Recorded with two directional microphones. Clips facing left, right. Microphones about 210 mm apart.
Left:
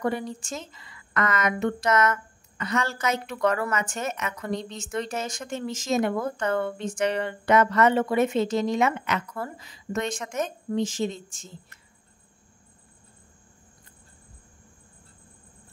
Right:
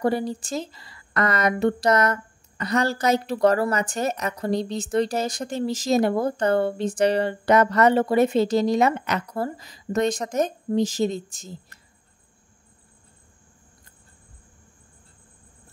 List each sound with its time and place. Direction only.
0.0 s a woman's voice: 35° right (ahead or behind)